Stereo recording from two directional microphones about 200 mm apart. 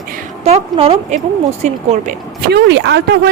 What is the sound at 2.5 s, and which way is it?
Speech, 55° right (ahead or behind).